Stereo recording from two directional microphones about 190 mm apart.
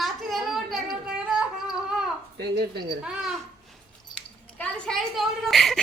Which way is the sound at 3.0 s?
Centre (ahead or behind).